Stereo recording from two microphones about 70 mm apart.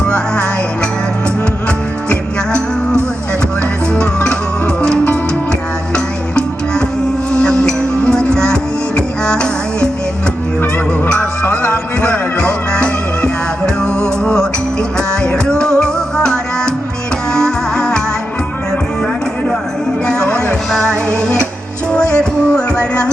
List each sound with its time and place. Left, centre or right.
3.9 s music: centre
7.6 s music: centre
10.6 s music: left; by 18.0 s centre
20.1 s music: centre
20.8 s music: right
21.9 s music: centre